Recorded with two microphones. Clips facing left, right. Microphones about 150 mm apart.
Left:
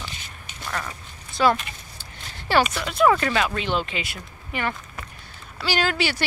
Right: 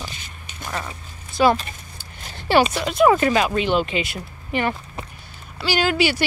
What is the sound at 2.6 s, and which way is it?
Speech, 25° right (ahead or behind).